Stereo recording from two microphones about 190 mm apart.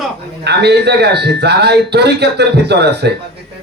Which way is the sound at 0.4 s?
60° right (ahead or behind).